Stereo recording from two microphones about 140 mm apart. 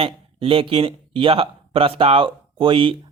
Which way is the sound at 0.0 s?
40° right (ahead or behind).